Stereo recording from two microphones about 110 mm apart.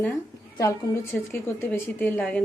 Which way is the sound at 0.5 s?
30° left (ahead or behind).